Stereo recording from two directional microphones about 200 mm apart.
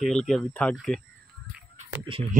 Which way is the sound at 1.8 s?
25° right (ahead or behind).